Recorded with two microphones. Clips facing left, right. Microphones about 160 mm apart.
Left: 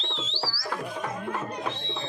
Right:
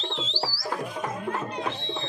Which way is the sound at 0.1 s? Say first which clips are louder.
Right 3 dB; 35° right (ahead or behind).